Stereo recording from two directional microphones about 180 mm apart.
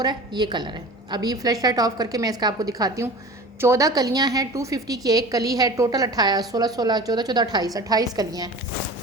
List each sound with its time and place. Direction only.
0.0 s a woman's voice: 25° right (ahead or behind)